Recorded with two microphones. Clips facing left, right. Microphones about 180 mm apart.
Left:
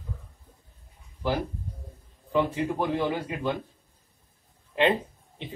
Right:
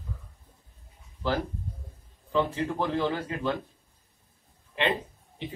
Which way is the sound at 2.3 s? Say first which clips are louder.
Left 2 dB; 15° left (ahead or behind).